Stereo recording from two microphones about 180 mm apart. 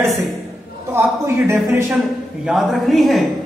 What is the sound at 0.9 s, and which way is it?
Speech, 15° right (ahead or behind).